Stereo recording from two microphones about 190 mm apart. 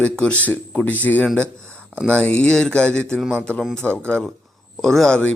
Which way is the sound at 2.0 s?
5° left (ahead or behind).